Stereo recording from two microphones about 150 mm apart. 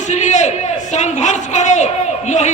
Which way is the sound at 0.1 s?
50° left (ahead or behind).